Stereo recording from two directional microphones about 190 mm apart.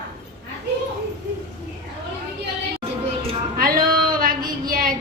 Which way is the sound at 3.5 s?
50° right (ahead or behind).